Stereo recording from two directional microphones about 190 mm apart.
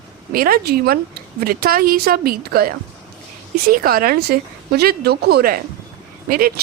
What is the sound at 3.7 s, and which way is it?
Speech, 50° right (ahead or behind).